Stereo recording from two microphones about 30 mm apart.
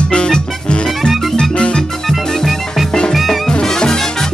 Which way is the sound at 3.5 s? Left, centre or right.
Left.